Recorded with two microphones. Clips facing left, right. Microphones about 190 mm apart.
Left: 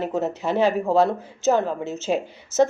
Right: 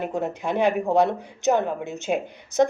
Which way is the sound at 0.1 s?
10° right (ahead or behind).